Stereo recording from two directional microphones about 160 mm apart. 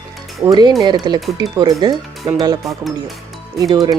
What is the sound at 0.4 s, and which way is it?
Speech, 25° right (ahead or behind).